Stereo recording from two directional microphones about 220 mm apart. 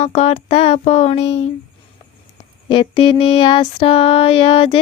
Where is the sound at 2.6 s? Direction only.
25° left (ahead or behind).